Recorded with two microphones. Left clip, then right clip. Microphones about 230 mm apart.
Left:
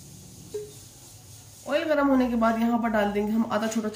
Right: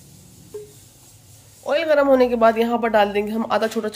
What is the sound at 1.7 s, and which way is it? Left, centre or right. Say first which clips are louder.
Speech: right 7 dB; right.